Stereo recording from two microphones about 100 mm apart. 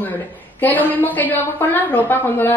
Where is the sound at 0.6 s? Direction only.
20° left (ahead or behind).